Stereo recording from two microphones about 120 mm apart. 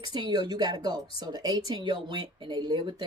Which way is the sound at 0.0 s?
35° right (ahead or behind).